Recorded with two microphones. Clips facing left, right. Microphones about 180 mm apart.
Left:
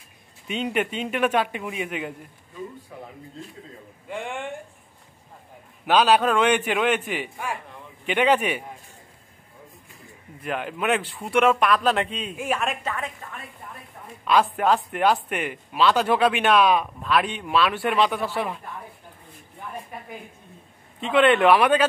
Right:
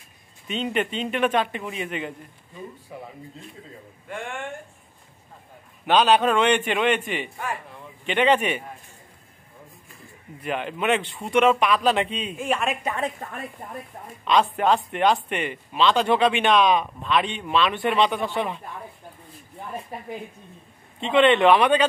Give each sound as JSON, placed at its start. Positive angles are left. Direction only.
{"t": 0.5, "sound": "a man's voice", "side_deg": 10}
{"t": 4.1, "sound": "a man's voice", "side_deg": 15}
{"t": 5.9, "sound": "a man's voice", "side_deg": 5}
{"t": 10.4, "sound": "speech", "side_deg": 0}
{"t": 14.2, "sound": "speech", "side_deg": 5}
{"t": 19.9, "sound": "a woman's voice", "side_deg": -35}
{"t": 21.0, "sound": "speech", "side_deg": 5}